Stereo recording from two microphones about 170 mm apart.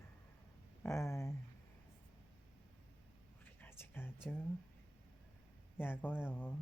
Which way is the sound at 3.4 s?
10° left (ahead or behind).